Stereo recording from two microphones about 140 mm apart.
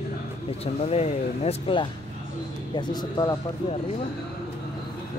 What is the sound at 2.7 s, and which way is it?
Speech, 30° left (ahead or behind).